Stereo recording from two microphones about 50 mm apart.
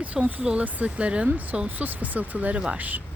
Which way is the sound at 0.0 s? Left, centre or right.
Right.